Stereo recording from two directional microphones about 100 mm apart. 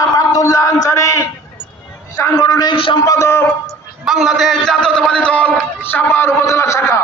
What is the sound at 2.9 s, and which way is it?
Speech, 35° left (ahead or behind).